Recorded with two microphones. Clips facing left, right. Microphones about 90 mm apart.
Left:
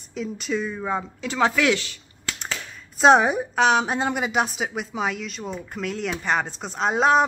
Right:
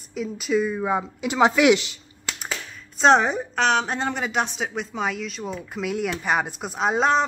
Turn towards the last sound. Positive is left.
turn(degrees=0)  # may be behind; listen again after turning